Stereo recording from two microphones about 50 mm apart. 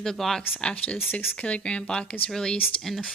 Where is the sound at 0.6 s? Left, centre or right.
Left.